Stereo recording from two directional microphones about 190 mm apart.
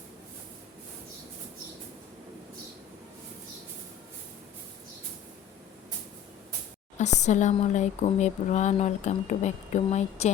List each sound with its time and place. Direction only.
7.2 s speech: 40° left (ahead or behind)